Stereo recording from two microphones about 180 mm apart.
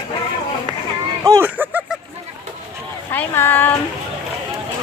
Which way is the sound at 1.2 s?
20° right (ahead or behind).